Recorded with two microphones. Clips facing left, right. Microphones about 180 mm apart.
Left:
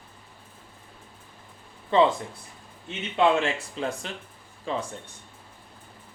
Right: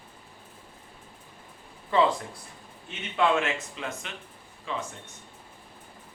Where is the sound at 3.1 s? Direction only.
30° left (ahead or behind).